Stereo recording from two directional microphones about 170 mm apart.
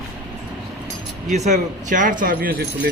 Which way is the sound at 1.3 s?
45° right (ahead or behind).